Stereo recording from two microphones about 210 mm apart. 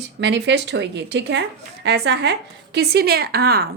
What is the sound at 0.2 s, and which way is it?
A woman's voice, 55° right (ahead or behind).